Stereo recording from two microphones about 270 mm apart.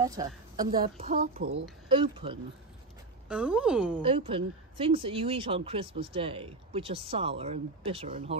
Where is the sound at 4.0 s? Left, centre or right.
Centre.